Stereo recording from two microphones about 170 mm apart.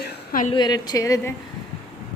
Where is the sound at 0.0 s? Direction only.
55° left (ahead or behind).